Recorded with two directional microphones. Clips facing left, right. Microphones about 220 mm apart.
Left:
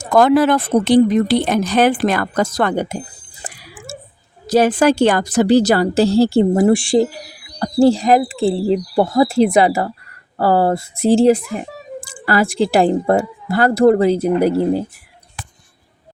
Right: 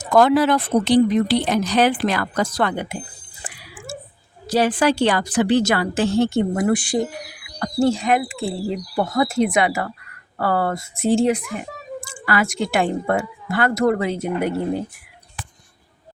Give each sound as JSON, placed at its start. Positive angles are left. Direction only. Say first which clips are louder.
{"t": 0.1, "sound": "speech", "louder": "left 3 dB", "side_deg": 50}
{"t": 3.4, "sound": "a sound", "louder": "left 2 dB", "side_deg": 45}
{"t": 4.4, "sound": "speech", "louder": "left 5 dB", "side_deg": 45}